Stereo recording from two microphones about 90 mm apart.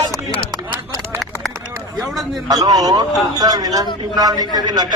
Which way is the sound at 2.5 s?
45° right (ahead or behind).